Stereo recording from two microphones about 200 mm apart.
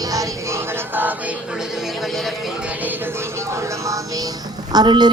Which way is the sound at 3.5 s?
15° right (ahead or behind).